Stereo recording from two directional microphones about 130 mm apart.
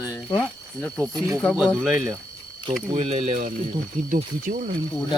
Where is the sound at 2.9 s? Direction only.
50° right (ahead or behind).